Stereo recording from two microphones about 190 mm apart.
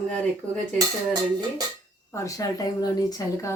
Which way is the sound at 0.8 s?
20° right (ahead or behind).